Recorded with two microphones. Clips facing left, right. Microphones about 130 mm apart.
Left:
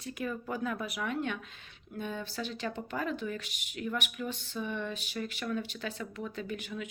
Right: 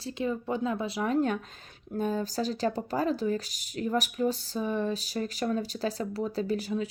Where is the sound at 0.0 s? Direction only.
25° right (ahead or behind).